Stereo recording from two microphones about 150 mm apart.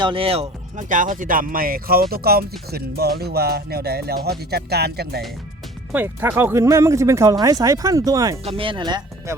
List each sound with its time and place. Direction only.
0.0 s speech: 35° right (ahead or behind)
0.8 s speech: 60° right (ahead or behind); by 5.2 s 90° right
5.9 s speech: 10° right (ahead or behind)
8.4 s speech: 35° right (ahead or behind)